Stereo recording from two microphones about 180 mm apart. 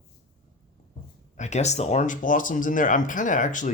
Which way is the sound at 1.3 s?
40° left (ahead or behind).